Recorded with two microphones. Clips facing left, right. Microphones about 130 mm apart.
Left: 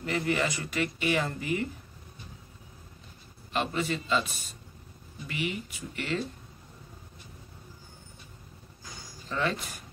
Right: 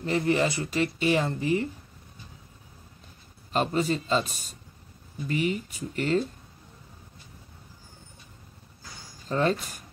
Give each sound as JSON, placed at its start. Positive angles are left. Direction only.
{"t": 0.0, "sound": "speech", "side_deg": -30}
{"t": 3.5, "sound": "speech", "side_deg": -40}
{"t": 9.3, "sound": "speech", "side_deg": -40}